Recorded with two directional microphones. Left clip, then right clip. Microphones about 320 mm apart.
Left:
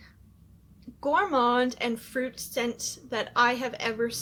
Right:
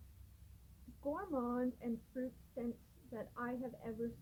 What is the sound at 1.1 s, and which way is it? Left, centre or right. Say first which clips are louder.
Speech: left 19 dB; centre.